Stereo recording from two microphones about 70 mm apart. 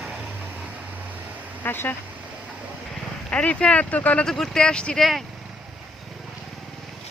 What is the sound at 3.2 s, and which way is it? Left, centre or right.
Speech, centre.